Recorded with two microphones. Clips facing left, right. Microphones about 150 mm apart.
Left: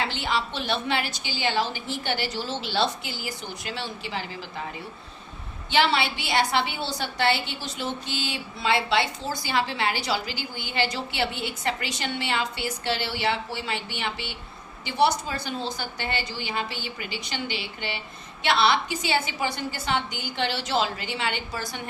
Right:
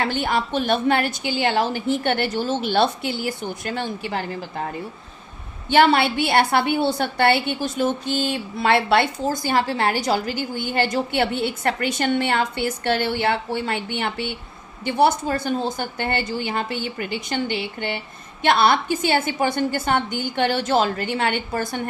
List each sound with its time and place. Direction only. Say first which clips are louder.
0.0 s a woman's voice: right 5 dB; 50° right (ahead or behind)